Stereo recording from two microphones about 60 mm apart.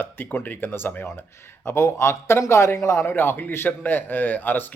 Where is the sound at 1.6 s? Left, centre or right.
Left.